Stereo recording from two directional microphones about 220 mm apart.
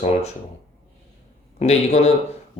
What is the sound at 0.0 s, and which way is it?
Speech, 30° left (ahead or behind).